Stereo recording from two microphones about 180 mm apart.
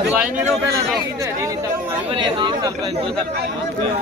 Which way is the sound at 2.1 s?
25° right (ahead or behind).